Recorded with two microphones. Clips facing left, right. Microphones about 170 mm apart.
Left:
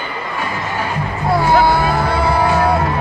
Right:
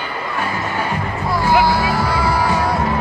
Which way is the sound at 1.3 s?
55° left (ahead or behind).